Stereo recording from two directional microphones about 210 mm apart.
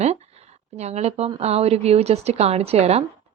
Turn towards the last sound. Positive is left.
turn(degrees=-30)  # may be behind; listen again after turning